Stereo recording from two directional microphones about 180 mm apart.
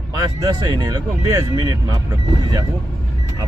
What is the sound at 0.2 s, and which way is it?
Speech, 20° right (ahead or behind).